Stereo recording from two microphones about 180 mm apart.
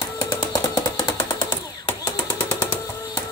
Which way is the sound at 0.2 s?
20° left (ahead or behind).